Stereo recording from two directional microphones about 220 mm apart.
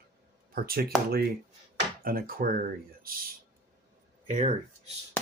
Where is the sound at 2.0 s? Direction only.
40° right (ahead or behind).